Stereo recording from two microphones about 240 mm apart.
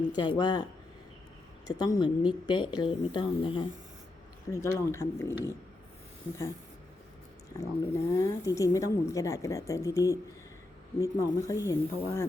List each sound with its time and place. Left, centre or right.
0.1 s speech: centre
7.6 s speech: centre